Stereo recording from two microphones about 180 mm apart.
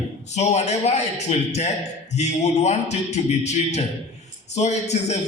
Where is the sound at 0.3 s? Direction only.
40° left (ahead or behind).